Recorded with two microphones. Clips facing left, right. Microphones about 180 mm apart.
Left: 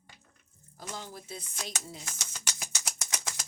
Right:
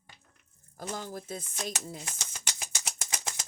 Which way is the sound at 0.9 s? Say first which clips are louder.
Right 4 dB; 45° right (ahead or behind).